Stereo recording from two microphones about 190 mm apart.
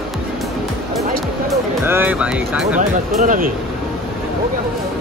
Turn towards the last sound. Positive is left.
turn(degrees=-45)  # may be behind; listen again after turning